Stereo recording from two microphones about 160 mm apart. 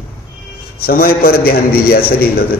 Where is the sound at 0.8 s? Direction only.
65° left (ahead or behind).